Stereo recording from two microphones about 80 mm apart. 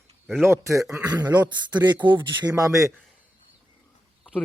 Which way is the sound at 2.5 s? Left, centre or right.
Right.